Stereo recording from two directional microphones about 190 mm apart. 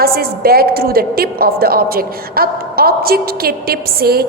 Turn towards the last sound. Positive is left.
turn(degrees=-55)  # may be behind; listen again after turning